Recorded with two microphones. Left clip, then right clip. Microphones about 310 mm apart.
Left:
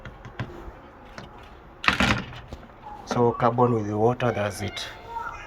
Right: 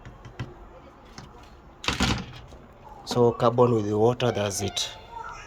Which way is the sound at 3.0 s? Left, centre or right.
Right.